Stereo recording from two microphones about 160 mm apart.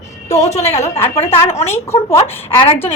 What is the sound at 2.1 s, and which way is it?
Speech, 35° left (ahead or behind).